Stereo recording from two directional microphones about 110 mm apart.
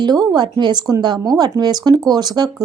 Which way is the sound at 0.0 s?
40° right (ahead or behind).